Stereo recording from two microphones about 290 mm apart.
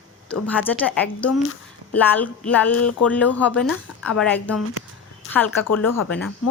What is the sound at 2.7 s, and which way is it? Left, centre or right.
Speech, left.